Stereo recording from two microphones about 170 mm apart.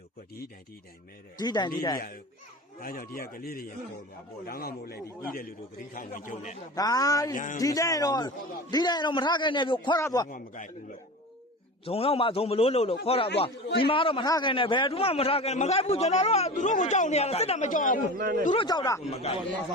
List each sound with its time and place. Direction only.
1.4 s a man's voice: 25° left (ahead or behind)
2.8 s a man's voice: 60° left (ahead or behind)
6.7 s a man's voice: 20° left (ahead or behind)
7.3 s a man's voice: 50° left (ahead or behind)
7.6 s a man's voice: 20° left (ahead or behind)
10.2 s a man's voice: 50° left (ahead or behind)
11.9 s a man's voice: 35° left (ahead or behind)
18.2 s speech: 55° right (ahead or behind)
18.5 s a man's voice: 25° left (ahead or behind)
19.1 s a man's voice: 35° left (ahead or behind)